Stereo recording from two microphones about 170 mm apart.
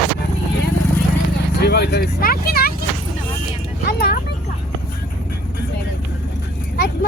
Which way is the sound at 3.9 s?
65° left (ahead or behind).